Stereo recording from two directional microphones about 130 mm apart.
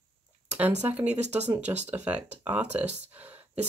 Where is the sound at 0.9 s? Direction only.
10° right (ahead or behind).